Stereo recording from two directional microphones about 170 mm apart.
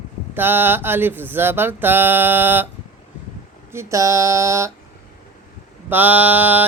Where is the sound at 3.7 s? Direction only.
15° right (ahead or behind).